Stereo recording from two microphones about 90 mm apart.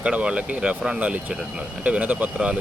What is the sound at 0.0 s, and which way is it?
Speech, 10° right (ahead or behind).